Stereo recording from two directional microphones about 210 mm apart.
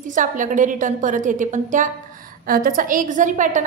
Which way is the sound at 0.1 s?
40° right (ahead or behind).